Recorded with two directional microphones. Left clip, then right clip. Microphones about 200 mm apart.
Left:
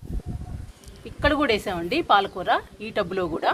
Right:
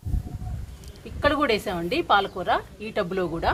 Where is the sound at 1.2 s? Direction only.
30° left (ahead or behind).